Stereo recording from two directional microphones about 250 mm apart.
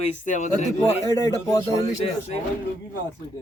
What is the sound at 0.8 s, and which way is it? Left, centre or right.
A man's voice, centre.